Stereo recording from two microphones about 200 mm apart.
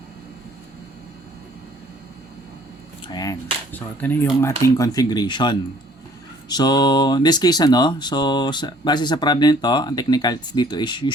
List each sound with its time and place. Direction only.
3.1 s speech: 20° left (ahead or behind)